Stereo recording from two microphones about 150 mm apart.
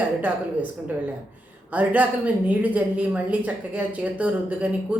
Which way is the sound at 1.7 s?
10° right (ahead or behind).